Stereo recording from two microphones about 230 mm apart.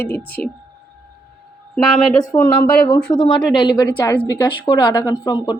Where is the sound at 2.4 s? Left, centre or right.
Left.